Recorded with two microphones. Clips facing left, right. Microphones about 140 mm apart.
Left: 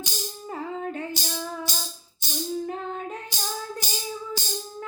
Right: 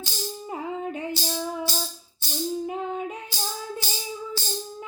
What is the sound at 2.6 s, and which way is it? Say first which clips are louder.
Female singing: right 2 dB; 10° right (ahead or behind).